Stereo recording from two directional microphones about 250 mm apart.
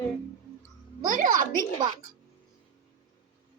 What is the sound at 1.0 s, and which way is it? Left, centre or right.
Speech, right.